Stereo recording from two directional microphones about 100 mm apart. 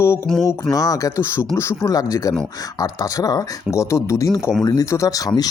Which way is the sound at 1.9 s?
40° left (ahead or behind).